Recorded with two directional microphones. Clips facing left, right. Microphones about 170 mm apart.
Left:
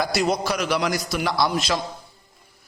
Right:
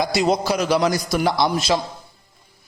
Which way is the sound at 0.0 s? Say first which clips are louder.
Right 3 dB; 20° right (ahead or behind).